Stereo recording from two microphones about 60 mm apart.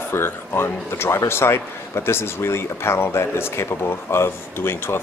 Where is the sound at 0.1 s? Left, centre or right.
Left.